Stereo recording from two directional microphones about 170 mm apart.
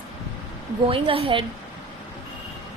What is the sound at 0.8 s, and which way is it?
Speech, 30° right (ahead or behind).